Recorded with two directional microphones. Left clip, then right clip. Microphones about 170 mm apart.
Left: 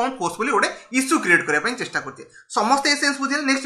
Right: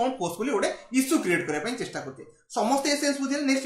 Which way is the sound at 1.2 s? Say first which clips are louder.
Left 9 dB; 35° right (ahead or behind).